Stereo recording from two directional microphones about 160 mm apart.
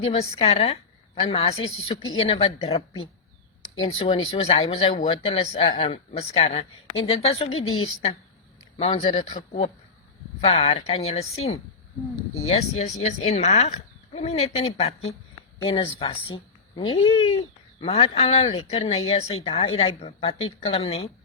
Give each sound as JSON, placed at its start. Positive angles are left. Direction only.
{"t": 0.0, "sound": "speech", "side_deg": 40}
{"t": 10.4, "sound": "speech", "side_deg": 40}